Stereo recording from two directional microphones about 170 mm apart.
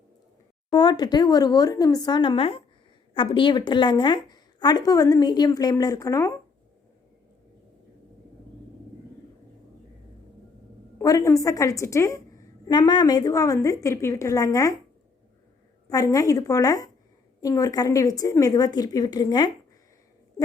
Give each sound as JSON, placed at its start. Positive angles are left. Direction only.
{"t": 0.7, "sound": "a woman's voice", "side_deg": 25}
{"t": 10.9, "sound": "a woman's voice", "side_deg": 20}
{"t": 15.9, "sound": "a woman's voice", "side_deg": 20}